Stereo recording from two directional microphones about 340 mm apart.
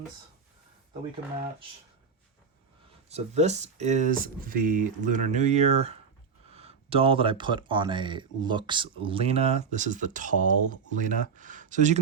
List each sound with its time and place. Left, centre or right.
3.1 s speech: centre